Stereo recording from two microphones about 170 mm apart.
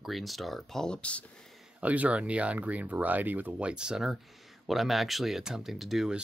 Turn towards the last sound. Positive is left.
turn(degrees=-5)  # may be behind; listen again after turning